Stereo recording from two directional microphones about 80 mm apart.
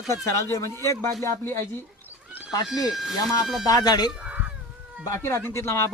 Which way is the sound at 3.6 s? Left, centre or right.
Left.